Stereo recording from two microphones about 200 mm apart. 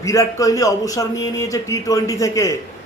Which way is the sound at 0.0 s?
15° left (ahead or behind).